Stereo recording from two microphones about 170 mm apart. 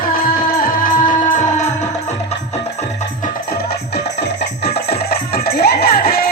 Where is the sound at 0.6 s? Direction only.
55° left (ahead or behind).